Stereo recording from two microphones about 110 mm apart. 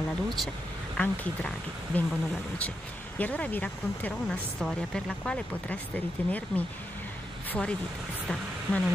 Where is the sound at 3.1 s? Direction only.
15° left (ahead or behind).